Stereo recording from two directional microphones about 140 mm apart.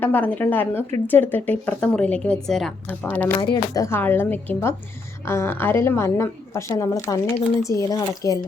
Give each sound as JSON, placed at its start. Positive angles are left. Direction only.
{"t": 0.0, "sound": "a woman's voice", "side_deg": 15}